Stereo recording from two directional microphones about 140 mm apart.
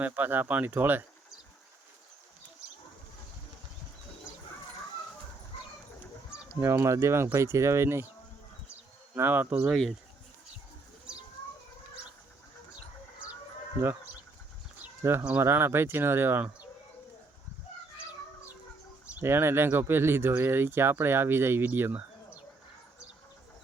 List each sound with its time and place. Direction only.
0.0 s speech: 15° right (ahead or behind)
6.6 s speech: 20° right (ahead or behind)
9.1 s speech: 15° right (ahead or behind)
15.3 s speech: 15° right (ahead or behind)
19.1 s speech: 15° right (ahead or behind)